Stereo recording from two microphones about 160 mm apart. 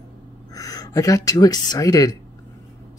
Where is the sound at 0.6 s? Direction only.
25° left (ahead or behind).